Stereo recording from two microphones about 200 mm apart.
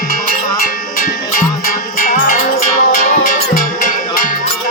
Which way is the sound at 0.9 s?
45° left (ahead or behind).